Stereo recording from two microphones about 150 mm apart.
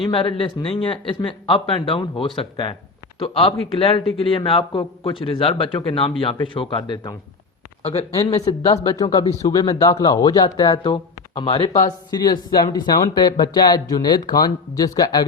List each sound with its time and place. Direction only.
0.0 s speech: 35° left (ahead or behind)
7.8 s speech: 40° left (ahead or behind)
8.1 s speech: 20° left (ahead or behind)